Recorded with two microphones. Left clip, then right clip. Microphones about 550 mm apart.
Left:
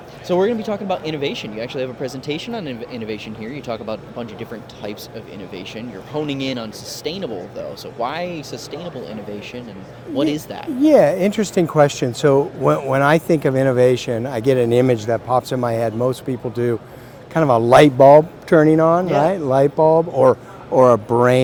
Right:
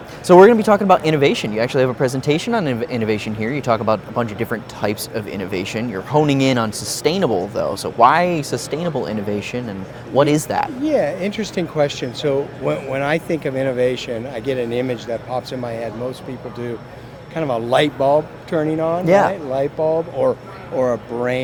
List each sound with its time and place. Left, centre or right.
0.3 s speech: right
10.8 s speech: left